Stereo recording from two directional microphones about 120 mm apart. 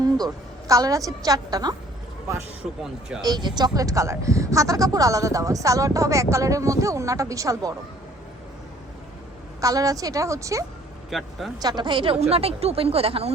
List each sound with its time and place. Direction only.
0.7 s speech: 30° right (ahead or behind)
3.2 s speech: 35° right (ahead or behind)
9.6 s speech: 30° right (ahead or behind)
11.1 s a man's voice: centre (ahead or behind)
11.6 s speech: 35° right (ahead or behind); by 13.3 s 55° right (ahead or behind)